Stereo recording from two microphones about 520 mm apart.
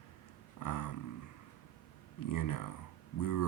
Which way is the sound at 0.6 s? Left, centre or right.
Left.